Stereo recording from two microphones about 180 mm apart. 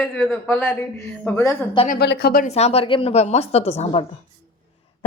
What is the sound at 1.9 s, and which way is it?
Speech, 65° left (ahead or behind).